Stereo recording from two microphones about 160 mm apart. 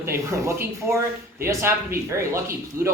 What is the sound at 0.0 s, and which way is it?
Speech, 15° right (ahead or behind).